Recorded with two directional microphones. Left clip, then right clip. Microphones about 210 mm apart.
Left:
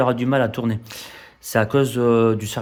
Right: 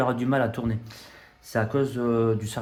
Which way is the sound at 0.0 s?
30° left (ahead or behind).